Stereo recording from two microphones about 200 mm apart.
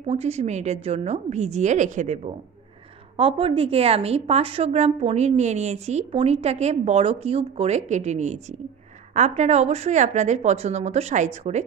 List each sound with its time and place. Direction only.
0.0 s a woman's voice: 30° right (ahead or behind)